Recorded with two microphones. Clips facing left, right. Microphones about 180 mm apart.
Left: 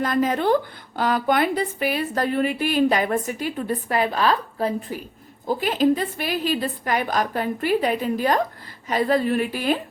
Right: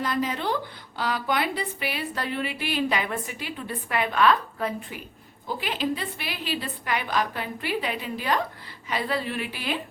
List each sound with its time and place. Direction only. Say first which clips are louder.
0.0 s a woman's voice: left 6 dB; 50° left (ahead or behind)